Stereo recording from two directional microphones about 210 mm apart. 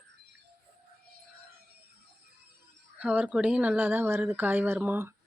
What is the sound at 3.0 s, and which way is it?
Speech, 5° right (ahead or behind).